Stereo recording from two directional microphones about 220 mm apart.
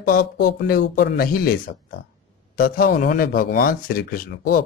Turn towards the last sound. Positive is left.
turn(degrees=40)  # may be behind; listen again after turning